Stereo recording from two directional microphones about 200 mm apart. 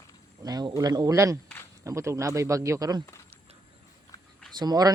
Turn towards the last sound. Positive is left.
turn(degrees=-20)  # may be behind; listen again after turning